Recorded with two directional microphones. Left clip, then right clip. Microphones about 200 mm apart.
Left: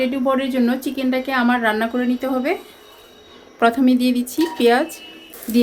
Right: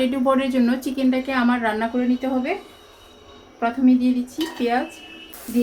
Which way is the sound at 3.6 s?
60° left (ahead or behind).